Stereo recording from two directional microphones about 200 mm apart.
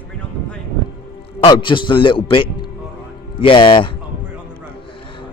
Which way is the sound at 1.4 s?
25° left (ahead or behind).